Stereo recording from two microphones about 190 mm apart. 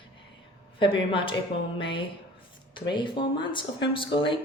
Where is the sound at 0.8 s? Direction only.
25° left (ahead or behind).